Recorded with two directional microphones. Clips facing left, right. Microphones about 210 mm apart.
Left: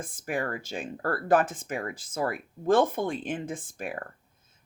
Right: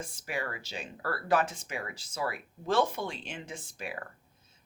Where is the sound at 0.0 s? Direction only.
50° left (ahead or behind).